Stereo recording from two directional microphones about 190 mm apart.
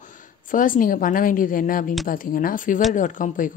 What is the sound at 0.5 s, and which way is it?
A woman's voice, 45° left (ahead or behind).